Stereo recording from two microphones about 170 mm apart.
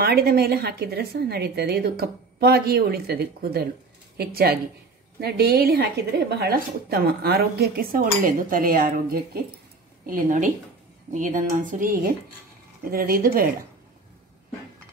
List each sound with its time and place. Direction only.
0.0 s a woman's voice: 65° right (ahead or behind)